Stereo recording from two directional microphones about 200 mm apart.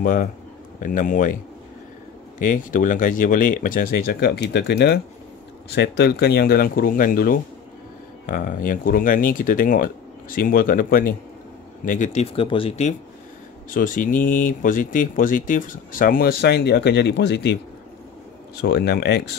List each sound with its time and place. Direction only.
0.0 s speech: 40° left (ahead or behind)
2.3 s speech: 40° left (ahead or behind)
13.7 s speech: 45° left (ahead or behind)
18.6 s speech: 55° left (ahead or behind)